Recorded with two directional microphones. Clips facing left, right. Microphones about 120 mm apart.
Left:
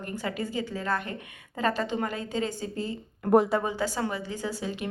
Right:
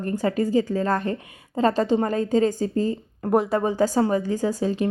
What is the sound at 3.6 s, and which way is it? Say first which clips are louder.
A woman's voice: right 8 dB; 40° right (ahead or behind).